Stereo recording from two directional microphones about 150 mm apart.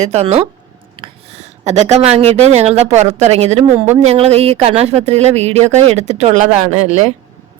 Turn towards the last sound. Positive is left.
turn(degrees=-50)  # may be behind; listen again after turning